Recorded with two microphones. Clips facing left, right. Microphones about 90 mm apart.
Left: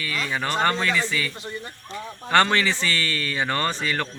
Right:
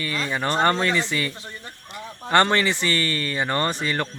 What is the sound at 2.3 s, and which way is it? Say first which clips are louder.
A man's voice: right 1 dB; 25° right (ahead or behind).